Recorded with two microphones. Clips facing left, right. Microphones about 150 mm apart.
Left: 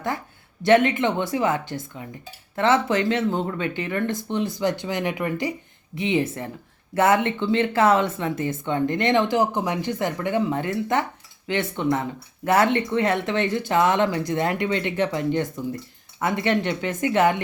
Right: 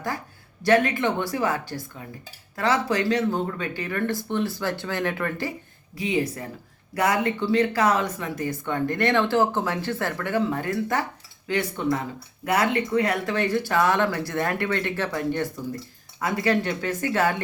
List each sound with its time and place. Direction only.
0.6 s speech: 25° left (ahead or behind)